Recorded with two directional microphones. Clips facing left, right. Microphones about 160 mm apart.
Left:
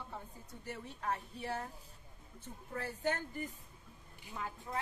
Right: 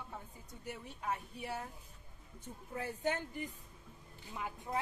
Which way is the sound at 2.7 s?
10° right (ahead or behind).